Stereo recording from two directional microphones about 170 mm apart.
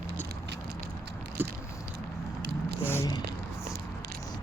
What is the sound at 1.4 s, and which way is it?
Biting, 10° right (ahead or behind).